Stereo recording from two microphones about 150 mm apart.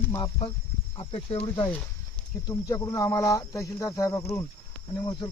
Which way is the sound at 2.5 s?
20° left (ahead or behind).